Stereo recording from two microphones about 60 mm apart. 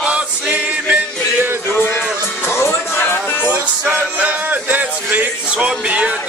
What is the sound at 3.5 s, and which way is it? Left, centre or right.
Music, right.